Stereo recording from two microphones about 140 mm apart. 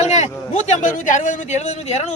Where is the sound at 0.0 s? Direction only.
55° left (ahead or behind).